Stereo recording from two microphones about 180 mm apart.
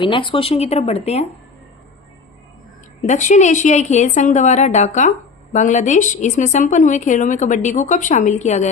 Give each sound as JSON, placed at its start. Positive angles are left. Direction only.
{"t": 0.0, "sound": "a woman's voice", "side_deg": 25}
{"t": 3.0, "sound": "a woman's voice", "side_deg": 40}